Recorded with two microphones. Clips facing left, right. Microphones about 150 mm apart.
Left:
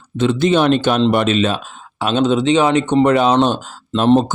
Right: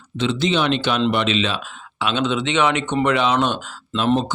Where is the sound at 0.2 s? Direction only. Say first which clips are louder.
Left 6 dB; 50° left (ahead or behind).